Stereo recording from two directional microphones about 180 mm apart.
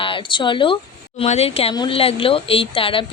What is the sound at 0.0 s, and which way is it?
Speech, 30° left (ahead or behind).